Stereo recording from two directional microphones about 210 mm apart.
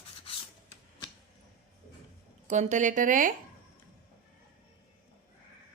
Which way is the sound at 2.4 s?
35° right (ahead or behind).